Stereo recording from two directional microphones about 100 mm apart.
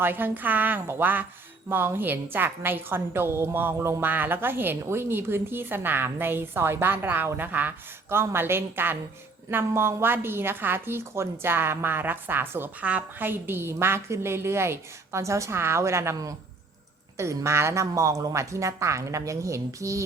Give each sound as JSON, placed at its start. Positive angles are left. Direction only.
{"t": 0.0, "sound": "a woman's voice", "side_deg": -20}